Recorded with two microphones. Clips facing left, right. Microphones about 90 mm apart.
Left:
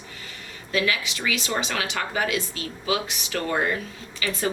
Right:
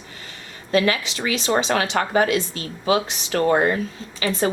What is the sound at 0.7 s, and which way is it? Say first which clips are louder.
Speech: right 5 dB; 35° right (ahead or behind).